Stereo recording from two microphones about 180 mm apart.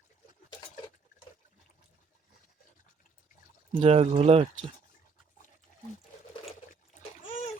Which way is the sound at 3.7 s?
35° right (ahead or behind).